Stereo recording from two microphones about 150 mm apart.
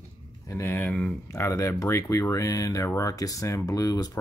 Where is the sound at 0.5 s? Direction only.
15° left (ahead or behind).